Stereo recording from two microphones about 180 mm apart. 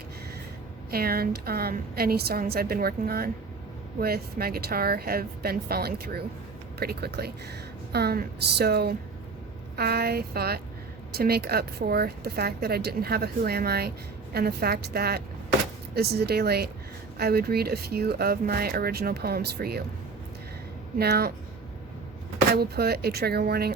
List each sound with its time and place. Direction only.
0.9 s speech: 55° right (ahead or behind)
21.0 s speech: 60° right (ahead or behind)
22.5 s speech: 60° right (ahead or behind)